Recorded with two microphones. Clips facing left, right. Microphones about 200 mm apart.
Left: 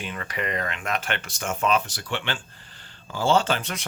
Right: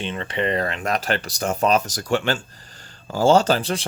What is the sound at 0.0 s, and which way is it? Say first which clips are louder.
Speech: right 6 dB; 25° right (ahead or behind).